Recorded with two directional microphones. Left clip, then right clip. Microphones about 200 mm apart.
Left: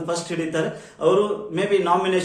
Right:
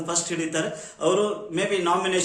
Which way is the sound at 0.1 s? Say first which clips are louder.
Left 2 dB; 5° right (ahead or behind).